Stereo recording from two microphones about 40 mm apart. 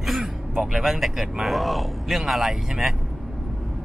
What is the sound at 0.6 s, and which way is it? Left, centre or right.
Speech, centre.